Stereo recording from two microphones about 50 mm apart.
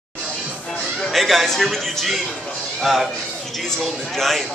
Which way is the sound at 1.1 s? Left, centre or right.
Centre.